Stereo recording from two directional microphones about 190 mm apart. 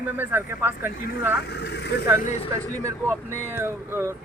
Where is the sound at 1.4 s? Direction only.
60° left (ahead or behind).